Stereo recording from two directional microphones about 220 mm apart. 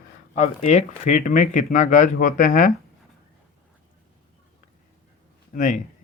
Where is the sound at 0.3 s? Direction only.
30° left (ahead or behind).